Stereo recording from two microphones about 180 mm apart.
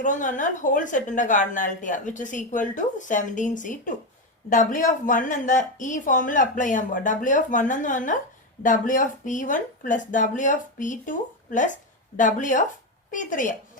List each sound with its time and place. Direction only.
0.0 s speech: 45° left (ahead or behind)